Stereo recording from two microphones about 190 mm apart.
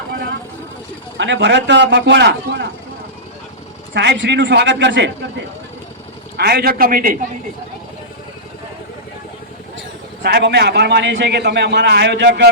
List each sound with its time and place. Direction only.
1.2 s a man's voice: 65° right (ahead or behind)
3.9 s a man's voice: 65° right (ahead or behind)
6.3 s a man's voice: 55° right (ahead or behind)
10.2 s a man's voice: 60° right (ahead or behind)